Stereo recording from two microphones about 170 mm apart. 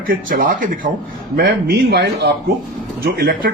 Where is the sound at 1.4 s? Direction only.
75° right (ahead or behind).